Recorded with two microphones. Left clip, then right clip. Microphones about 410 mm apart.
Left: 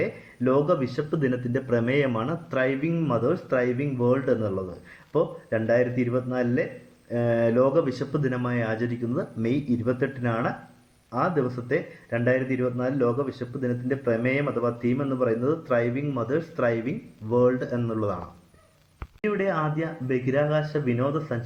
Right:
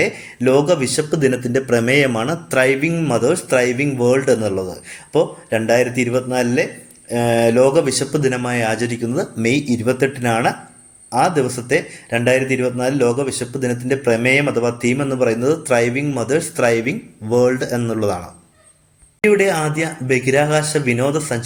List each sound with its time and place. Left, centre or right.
0.0 s a man's voice: left
19.2 s speech: left